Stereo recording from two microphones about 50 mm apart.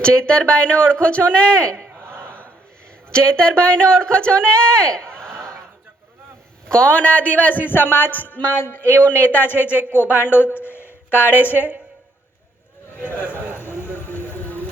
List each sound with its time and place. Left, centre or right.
0.0 s speech: centre
2.0 s battle cry: left
3.1 s speech: centre
6.7 s speech: left
7.6 s speech: left
8.5 s speech: left
9.0 s speech: left
10.2 s a sound: left
11.2 s speech: left
13.0 s speech: left